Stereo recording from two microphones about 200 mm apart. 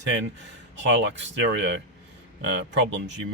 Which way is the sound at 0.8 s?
65° right (ahead or behind).